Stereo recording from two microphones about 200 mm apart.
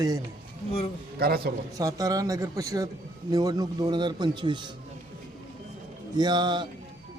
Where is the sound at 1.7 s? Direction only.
20° right (ahead or behind).